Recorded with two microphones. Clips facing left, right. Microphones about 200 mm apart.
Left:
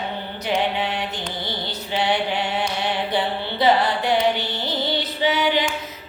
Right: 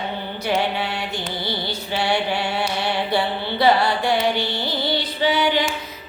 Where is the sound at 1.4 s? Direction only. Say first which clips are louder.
Right 3 dB; 15° left (ahead or behind).